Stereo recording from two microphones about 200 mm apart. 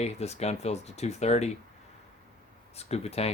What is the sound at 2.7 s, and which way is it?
Speech, 30° left (ahead or behind).